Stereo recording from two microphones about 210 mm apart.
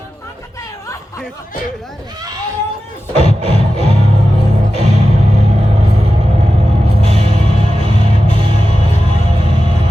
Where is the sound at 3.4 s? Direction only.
30° right (ahead or behind).